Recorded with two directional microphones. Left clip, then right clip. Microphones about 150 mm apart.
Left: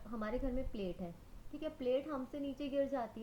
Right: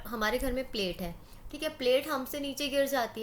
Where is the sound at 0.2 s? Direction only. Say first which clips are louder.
Right 10 dB; 15° right (ahead or behind).